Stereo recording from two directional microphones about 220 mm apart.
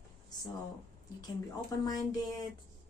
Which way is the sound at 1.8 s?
20° left (ahead or behind).